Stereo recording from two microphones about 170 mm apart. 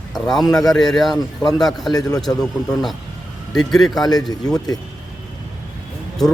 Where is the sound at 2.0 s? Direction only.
20° left (ahead or behind).